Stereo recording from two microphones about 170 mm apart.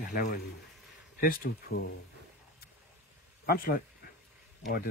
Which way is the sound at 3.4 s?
60° left (ahead or behind).